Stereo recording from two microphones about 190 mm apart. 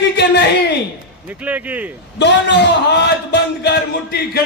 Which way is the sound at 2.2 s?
65° left (ahead or behind).